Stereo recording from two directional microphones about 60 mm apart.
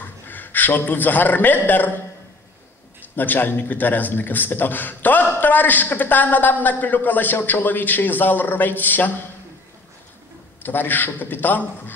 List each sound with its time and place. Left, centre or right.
0.3 s a man's voice: left
3.2 s a man's voice: left
10.6 s a man's voice: left